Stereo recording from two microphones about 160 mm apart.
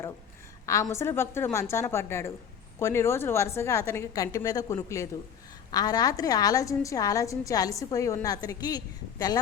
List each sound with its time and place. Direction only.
0.6 s a woman's voice: 20° left (ahead or behind)